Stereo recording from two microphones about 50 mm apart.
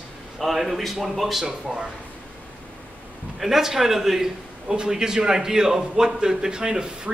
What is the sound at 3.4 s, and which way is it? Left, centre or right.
A man's voice, centre.